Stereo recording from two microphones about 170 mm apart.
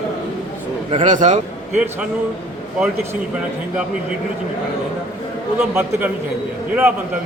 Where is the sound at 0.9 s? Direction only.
45° right (ahead or behind).